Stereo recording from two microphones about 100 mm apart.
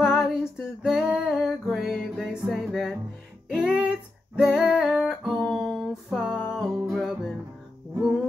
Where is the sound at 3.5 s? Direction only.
10° right (ahead or behind).